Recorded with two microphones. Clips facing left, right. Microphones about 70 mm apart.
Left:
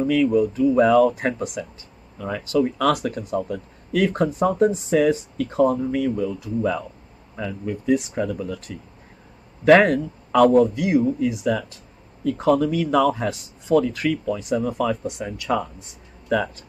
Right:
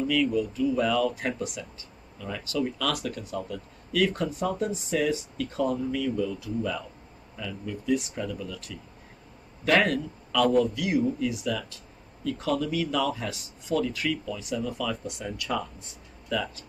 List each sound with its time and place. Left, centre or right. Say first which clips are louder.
0.0 s speech: left 7 dB; left
9.8 s speech: left 7 dB; left